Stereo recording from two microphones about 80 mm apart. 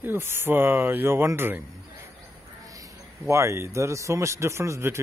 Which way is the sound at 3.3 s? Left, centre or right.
Right.